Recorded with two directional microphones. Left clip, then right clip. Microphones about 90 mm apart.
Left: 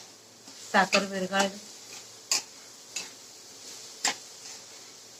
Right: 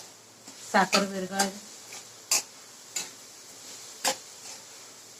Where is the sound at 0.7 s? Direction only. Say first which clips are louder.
Even; 30° right (ahead or behind).